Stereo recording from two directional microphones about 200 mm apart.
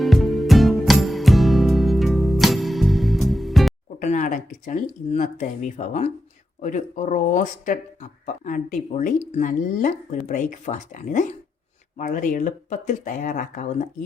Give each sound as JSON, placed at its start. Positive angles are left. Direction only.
{"t": 0.0, "sound": "music", "side_deg": 0}
{"t": 4.0, "sound": "a sound", "side_deg": 40}
{"t": 5.1, "sound": "speech", "side_deg": 40}